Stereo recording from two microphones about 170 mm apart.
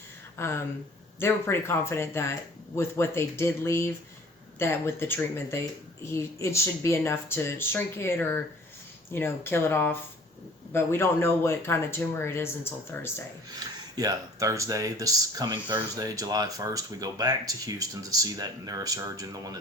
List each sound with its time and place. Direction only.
0.3 s speech: 15° left (ahead or behind)
13.5 s speech: 25° right (ahead or behind)